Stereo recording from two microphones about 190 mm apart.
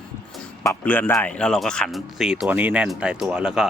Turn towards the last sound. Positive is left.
turn(degrees=-5)  # may be behind; listen again after turning